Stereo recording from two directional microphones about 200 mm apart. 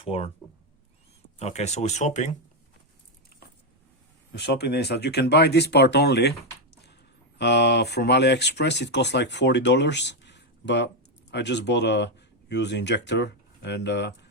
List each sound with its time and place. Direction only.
0.0 s speech: 30° left (ahead or behind)
1.4 s speech: 35° left (ahead or behind)
4.3 s speech: 55° left (ahead or behind)